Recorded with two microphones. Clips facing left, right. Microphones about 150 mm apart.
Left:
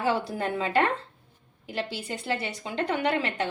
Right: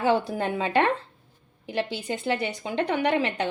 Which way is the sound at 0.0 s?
20° right (ahead or behind).